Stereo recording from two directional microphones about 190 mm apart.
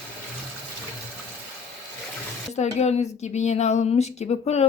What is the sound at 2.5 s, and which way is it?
Speech, 35° left (ahead or behind).